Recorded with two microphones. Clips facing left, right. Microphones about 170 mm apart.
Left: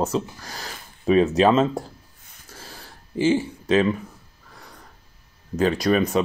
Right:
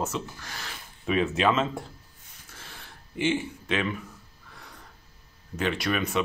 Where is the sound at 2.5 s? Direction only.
35° left (ahead or behind).